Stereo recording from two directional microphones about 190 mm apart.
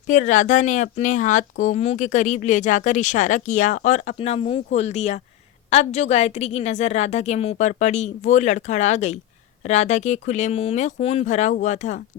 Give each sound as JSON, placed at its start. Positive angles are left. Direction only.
{"t": 0.1, "sound": "speech", "side_deg": 40}